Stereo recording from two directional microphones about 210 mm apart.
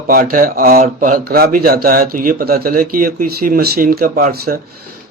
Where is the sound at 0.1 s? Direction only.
40° right (ahead or behind).